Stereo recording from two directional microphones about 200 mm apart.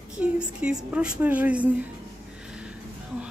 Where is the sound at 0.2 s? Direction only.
5° right (ahead or behind).